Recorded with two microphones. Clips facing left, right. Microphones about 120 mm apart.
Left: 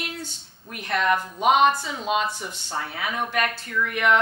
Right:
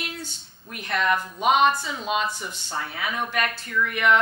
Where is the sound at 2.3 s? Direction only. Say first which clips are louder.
Left 1 dB; 30° left (ahead or behind); by 4.1 s 45° left (ahead or behind).